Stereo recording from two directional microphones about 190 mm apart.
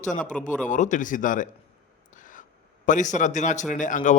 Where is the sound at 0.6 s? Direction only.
40° left (ahead or behind).